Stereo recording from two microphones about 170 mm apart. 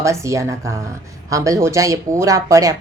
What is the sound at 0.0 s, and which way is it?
A woman's voice, 15° right (ahead or behind).